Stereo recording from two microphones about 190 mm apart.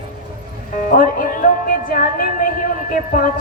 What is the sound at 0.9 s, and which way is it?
Music, 45° left (ahead or behind).